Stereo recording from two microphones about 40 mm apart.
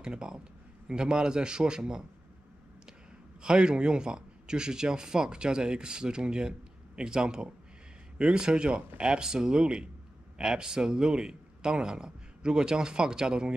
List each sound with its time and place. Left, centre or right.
0.0 s a man's voice: right
3.4 s a man's voice: right